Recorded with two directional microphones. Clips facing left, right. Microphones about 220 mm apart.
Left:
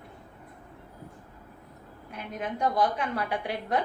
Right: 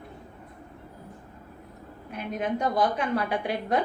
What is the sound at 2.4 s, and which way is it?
A woman's voice, 25° right (ahead or behind).